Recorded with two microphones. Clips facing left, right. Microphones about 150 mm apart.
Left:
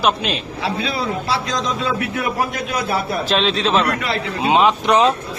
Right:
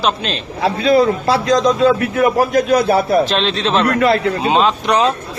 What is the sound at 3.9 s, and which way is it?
Speech, 50° right (ahead or behind).